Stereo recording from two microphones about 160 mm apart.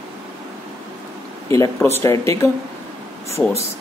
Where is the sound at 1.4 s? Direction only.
20° left (ahead or behind).